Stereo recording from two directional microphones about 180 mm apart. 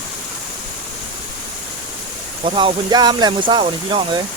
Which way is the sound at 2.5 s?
25° right (ahead or behind).